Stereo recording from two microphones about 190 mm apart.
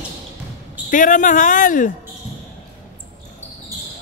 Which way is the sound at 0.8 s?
45° left (ahead or behind).